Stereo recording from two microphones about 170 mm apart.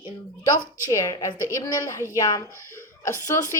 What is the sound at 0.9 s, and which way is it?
A woman's voice, 20° left (ahead or behind).